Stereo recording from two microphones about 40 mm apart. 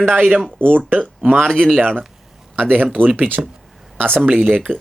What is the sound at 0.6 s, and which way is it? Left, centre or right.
Speech, right.